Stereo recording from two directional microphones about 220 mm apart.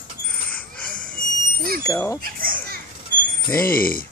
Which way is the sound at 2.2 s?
40° right (ahead or behind).